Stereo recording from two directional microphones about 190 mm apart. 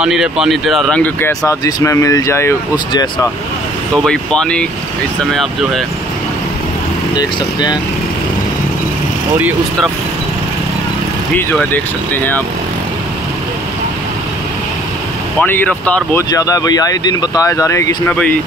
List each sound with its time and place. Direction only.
0.0 s speech: 5° right (ahead or behind); by 3.3 s 20° left (ahead or behind)
4.0 s speech: 5° left (ahead or behind)
7.2 s speech: 20° left (ahead or behind)
11.5 s speech: 10° left (ahead or behind)
15.4 s speech: 10° left (ahead or behind)
16.3 s speech: 20° left (ahead or behind)